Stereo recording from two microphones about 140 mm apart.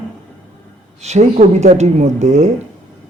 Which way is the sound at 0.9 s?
50° right (ahead or behind).